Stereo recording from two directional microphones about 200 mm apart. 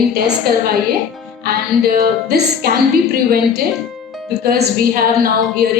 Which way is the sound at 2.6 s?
50° right (ahead or behind).